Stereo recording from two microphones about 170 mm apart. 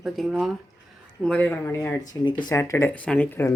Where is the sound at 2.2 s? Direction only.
25° left (ahead or behind).